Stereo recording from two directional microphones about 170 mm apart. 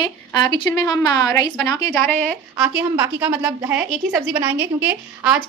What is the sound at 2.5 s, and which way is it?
A woman's voice, 15° right (ahead or behind).